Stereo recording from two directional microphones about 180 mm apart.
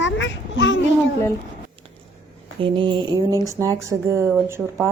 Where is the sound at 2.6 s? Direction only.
25° right (ahead or behind).